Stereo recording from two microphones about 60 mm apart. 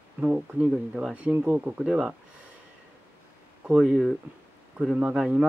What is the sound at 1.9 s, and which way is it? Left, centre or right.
Speech, centre.